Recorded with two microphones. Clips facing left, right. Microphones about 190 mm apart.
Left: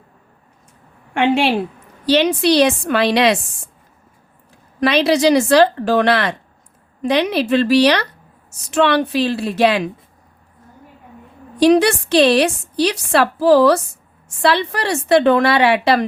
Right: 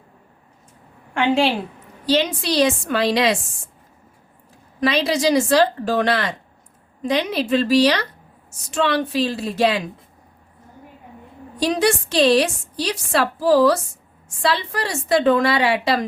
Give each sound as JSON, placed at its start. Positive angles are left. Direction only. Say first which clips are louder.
{"t": 2.0, "sound": "a woman's voice", "louder": "left 6 dB", "side_deg": 70}
{"t": 4.8, "sound": "a woman's voice", "louder": "left 5 dB", "side_deg": 70}
{"t": 11.6, "sound": "a woman's voice", "louder": "left 7 dB", "side_deg": 70}